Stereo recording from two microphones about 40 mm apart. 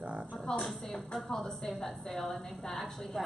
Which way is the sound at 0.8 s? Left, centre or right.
Centre.